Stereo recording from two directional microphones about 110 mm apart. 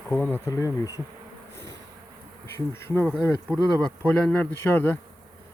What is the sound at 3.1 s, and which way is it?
Speech, 10° left (ahead or behind).